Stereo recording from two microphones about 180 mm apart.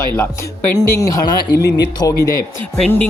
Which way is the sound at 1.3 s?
65° left (ahead or behind).